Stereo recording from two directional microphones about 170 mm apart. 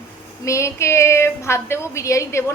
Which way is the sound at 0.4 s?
15° left (ahead or behind).